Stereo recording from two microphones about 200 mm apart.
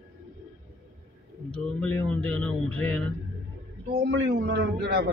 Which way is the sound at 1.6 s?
5° left (ahead or behind).